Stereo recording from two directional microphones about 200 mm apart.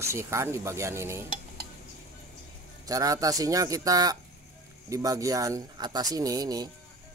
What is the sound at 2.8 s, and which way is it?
Speech, 15° right (ahead or behind).